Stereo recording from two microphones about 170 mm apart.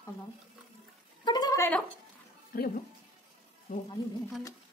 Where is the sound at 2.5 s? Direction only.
55° left (ahead or behind).